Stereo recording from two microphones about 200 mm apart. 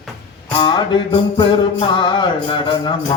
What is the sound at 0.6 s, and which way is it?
Music, 25° left (ahead or behind).